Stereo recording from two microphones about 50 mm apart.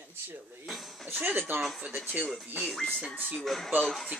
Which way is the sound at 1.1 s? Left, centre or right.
Right.